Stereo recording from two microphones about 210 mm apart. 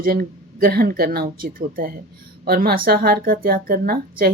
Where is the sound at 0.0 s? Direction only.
45° right (ahead or behind).